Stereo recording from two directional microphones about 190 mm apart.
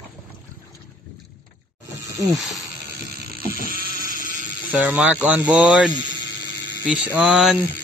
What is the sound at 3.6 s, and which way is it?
Sheep, 50° right (ahead or behind).